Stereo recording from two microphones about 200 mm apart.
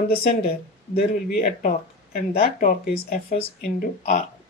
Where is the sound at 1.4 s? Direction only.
40° left (ahead or behind).